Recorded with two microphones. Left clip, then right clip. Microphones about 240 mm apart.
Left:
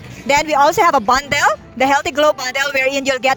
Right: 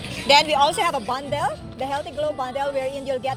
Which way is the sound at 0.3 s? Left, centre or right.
Left.